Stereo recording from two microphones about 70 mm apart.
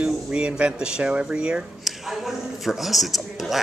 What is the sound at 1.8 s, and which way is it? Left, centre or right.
A man's voice, centre.